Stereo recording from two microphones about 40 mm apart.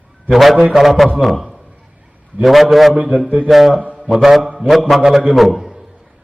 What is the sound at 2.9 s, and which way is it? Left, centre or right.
Speech, right.